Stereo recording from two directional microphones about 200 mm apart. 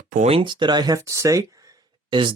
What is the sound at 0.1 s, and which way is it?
Speech, 35° right (ahead or behind).